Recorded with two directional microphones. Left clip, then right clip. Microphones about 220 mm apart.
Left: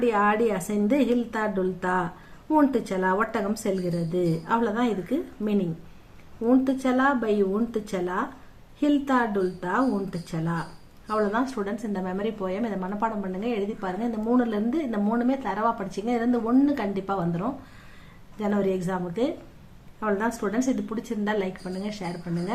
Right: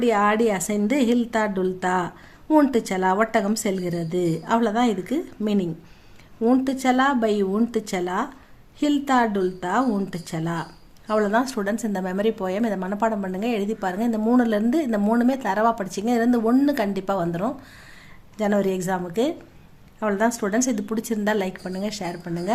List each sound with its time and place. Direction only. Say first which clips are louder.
0.0 s a woman's voice: right 3 dB; 40° right (ahead or behind)